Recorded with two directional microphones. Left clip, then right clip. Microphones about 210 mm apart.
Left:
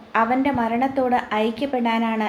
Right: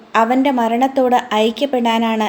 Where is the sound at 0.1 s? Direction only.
55° right (ahead or behind).